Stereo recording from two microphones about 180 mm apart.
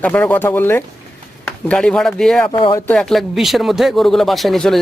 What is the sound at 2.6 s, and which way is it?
Speech, 25° left (ahead or behind).